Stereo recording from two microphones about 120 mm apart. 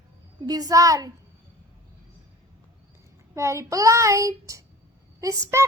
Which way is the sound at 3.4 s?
25° right (ahead or behind).